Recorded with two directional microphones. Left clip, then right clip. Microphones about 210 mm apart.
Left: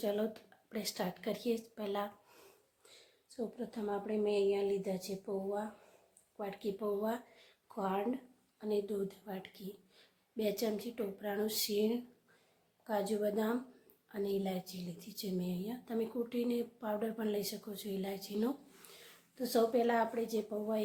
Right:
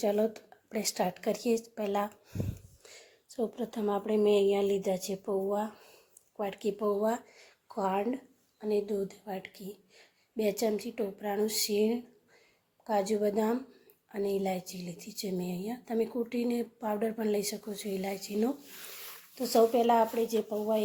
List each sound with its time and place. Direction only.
0.0 s speech: 20° right (ahead or behind)
3.2 s a woman's voice: 25° right (ahead or behind)